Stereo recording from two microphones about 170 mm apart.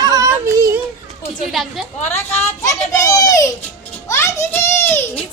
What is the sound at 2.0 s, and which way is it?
Speech, 40° left (ahead or behind).